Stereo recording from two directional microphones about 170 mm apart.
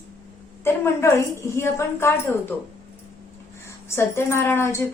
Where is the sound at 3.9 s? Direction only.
15° left (ahead or behind).